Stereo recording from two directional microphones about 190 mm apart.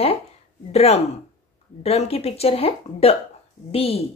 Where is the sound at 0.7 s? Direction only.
35° left (ahead or behind).